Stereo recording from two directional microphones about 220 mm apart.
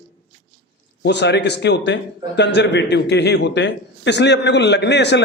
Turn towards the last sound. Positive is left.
turn(degrees=50)  # may be behind; listen again after turning